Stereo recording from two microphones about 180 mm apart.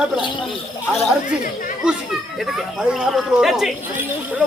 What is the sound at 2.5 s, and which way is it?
Speech, 5° right (ahead or behind).